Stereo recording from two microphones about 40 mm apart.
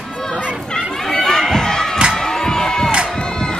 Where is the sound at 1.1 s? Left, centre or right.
Centre.